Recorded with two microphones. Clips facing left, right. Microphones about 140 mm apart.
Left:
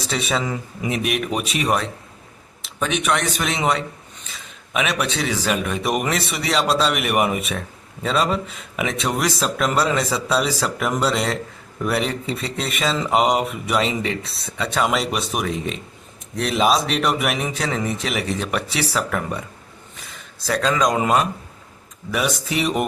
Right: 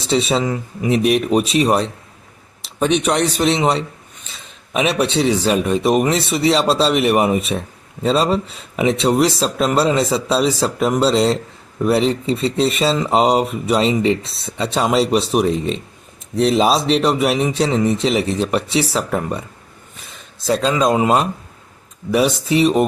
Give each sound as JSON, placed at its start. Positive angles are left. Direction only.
{"t": 0.0, "sound": "speech", "side_deg": -25}